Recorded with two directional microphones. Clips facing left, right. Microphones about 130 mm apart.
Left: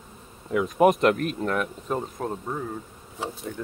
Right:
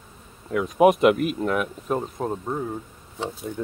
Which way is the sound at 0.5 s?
Centre (ahead or behind).